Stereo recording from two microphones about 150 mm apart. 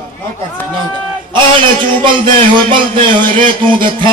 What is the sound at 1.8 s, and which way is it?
Speech, 35° right (ahead or behind).